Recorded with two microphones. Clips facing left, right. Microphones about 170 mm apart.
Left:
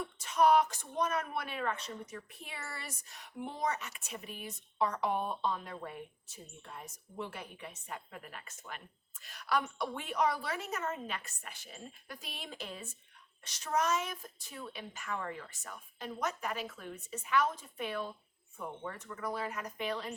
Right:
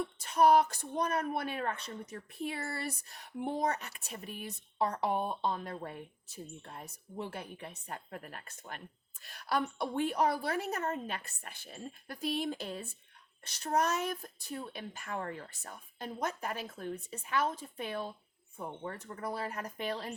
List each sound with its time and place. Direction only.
0.2 s speech: 35° right (ahead or behind)
7.2 s speech: 40° right (ahead or behind)